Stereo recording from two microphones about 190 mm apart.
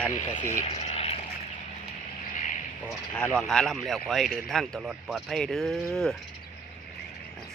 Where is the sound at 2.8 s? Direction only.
5° left (ahead or behind).